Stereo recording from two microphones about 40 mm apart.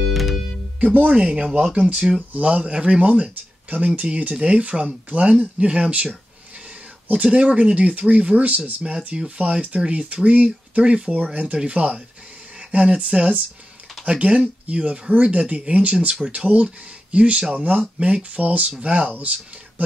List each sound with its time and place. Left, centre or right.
0.1 s music: centre
0.7 s speech: right
2.3 s speech: right
7.2 s speech: right